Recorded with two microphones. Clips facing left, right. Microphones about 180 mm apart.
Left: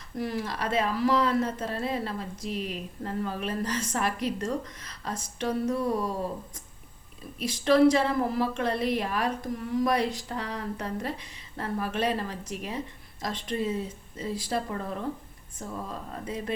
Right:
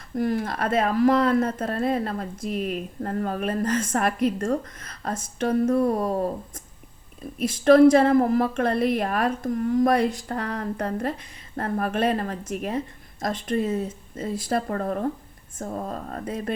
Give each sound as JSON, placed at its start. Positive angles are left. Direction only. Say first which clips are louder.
{"t": 0.2, "sound": "speech", "louder": "right 6 dB", "side_deg": -50}
{"t": 7.3, "sound": "speech", "louder": "right 6 dB", "side_deg": -50}